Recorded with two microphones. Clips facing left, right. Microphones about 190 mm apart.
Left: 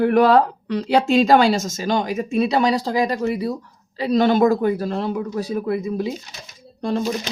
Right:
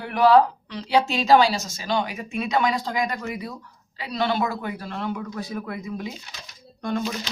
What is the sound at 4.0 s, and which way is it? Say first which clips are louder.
Speech: left 9 dB; 45° left (ahead or behind).